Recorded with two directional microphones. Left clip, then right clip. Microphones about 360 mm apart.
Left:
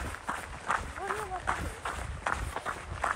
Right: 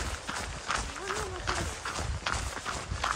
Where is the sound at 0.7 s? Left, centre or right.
Centre.